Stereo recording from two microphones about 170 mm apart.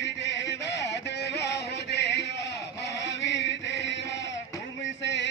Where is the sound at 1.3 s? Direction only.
80° left.